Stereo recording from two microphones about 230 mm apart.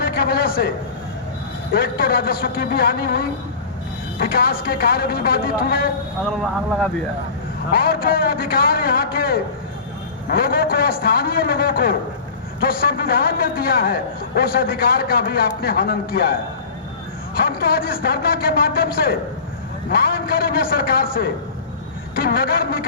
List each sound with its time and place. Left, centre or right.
0.0 s a sound: left
1.7 s a man's voice: left
7.7 s a man's voice: left
17.5 s a man's voice: left